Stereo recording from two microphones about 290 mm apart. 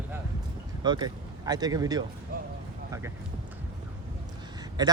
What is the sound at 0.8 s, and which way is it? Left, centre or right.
Speech, centre.